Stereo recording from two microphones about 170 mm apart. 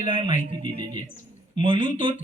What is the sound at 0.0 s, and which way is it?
Speech, 30° right (ahead or behind).